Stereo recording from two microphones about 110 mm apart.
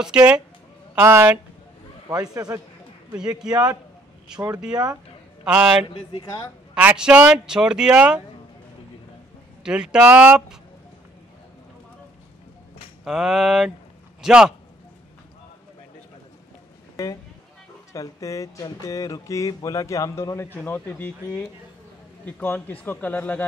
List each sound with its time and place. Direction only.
0.0 s speech: 10° right (ahead or behind)
1.0 s speech: 25° right (ahead or behind)
2.3 s a man's voice: 30° right (ahead or behind)
3.2 s speech: 5° right (ahead or behind)
5.4 s speech: 5° right (ahead or behind)
5.9 s speech: 55° left (ahead or behind)
6.7 s speech: 10° right (ahead or behind)
9.6 s a man's voice: 5° right (ahead or behind)
13.0 s speech: 5° right (ahead or behind)
16.9 s speech: 35° left (ahead or behind)
20.5 s speech: 20° left (ahead or behind)